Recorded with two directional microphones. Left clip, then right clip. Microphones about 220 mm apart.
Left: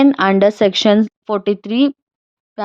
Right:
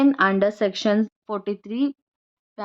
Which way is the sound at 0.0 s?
30° left (ahead or behind).